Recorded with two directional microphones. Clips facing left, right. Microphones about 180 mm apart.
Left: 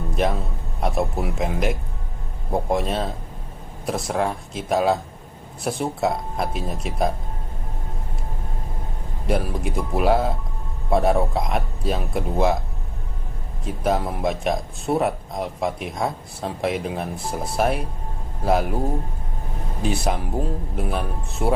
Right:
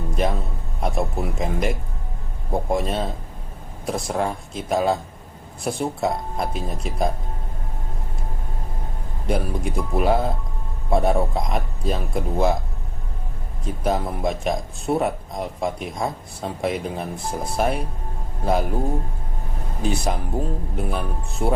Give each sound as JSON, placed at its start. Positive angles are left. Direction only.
{"t": 0.2, "sound": "speech", "side_deg": 0}
{"t": 9.2, "sound": "speech", "side_deg": 0}
{"t": 13.7, "sound": "speech", "side_deg": 0}
{"t": 19.8, "sound": "speech", "side_deg": 0}